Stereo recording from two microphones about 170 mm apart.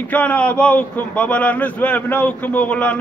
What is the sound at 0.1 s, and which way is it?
A man's voice, 10° left (ahead or behind).